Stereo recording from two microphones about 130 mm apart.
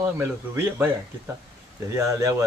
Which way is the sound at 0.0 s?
20° right (ahead or behind).